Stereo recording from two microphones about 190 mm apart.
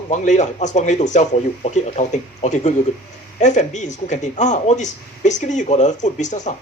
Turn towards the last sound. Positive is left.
turn(degrees=40)  # may be behind; listen again after turning